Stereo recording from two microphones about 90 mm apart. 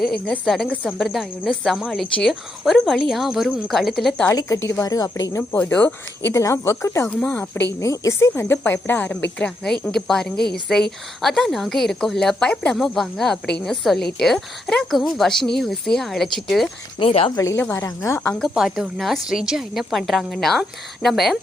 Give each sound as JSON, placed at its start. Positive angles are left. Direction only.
{"t": 0.0, "sound": "speech", "side_deg": 5}
{"t": 4.4, "sound": "a woman's voice", "side_deg": 40}
{"t": 5.4, "sound": "speech", "side_deg": 25}
{"t": 6.3, "sound": "a woman's voice", "side_deg": 35}
{"t": 7.1, "sound": "speech", "side_deg": 15}
{"t": 7.8, "sound": "a woman's voice", "side_deg": 35}
{"t": 8.3, "sound": "speech", "side_deg": 20}
{"t": 9.4, "sound": "speech", "side_deg": 10}
{"t": 17.0, "sound": "a woman's voice", "side_deg": 80}
{"t": 17.3, "sound": "a woman's voice", "side_deg": 35}
{"t": 18.3, "sound": "speech", "side_deg": 0}